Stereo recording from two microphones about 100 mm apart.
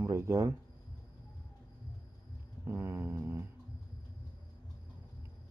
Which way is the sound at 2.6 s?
25° right (ahead or behind).